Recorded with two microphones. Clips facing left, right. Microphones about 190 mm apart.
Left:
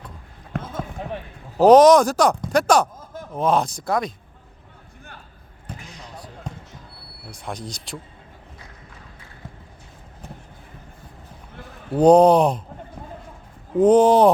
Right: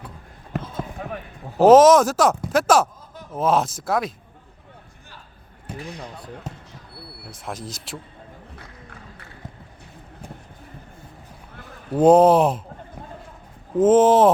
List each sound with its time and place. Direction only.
0.5 s a sound: 5° right (ahead or behind)
1.6 s speech: centre (ahead or behind)
2.9 s a sound: 45° left (ahead or behind)
3.3 s speech: 5° right (ahead or behind)
6.5 s basketball bounce: 5° right (ahead or behind)
7.3 s speech: centre (ahead or behind)
11.9 s speech: 5° right (ahead or behind)
13.7 s speech: centre (ahead or behind)